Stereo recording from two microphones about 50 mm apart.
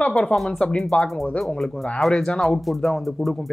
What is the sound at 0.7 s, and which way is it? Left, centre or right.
Speech, centre.